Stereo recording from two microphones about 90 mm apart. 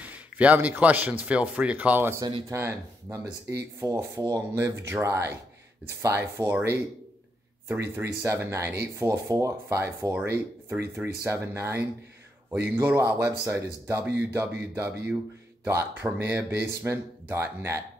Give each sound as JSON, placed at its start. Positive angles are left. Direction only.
{"t": 0.0, "sound": "speech", "side_deg": -15}
{"t": 2.5, "sound": "speech", "side_deg": -30}
{"t": 7.6, "sound": "speech", "side_deg": -25}